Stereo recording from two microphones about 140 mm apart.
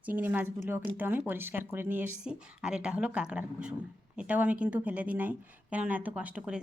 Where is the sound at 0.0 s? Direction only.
10° right (ahead or behind).